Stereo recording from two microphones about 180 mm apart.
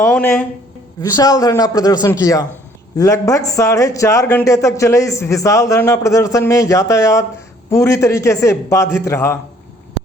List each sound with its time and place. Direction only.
0.0 s a man's voice: 10° left (ahead or behind)
1.1 s a man's voice: 20° left (ahead or behind)